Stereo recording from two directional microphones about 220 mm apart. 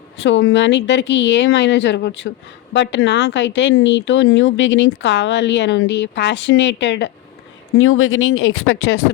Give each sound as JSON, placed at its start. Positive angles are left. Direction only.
{"t": 0.2, "sound": "speech", "side_deg": 55}
{"t": 7.8, "sound": "speech", "side_deg": 70}